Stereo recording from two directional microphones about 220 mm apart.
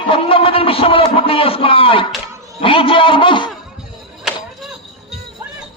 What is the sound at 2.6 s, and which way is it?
Speech, 25° left (ahead or behind).